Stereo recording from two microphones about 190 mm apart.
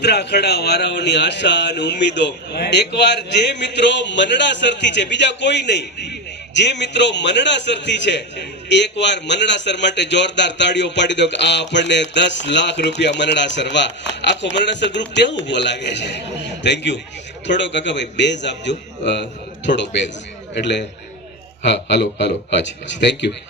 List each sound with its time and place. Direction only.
0.0 s a man's voice: 60° left (ahead or behind)